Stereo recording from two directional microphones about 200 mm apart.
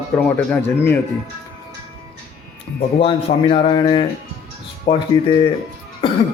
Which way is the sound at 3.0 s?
25° left (ahead or behind).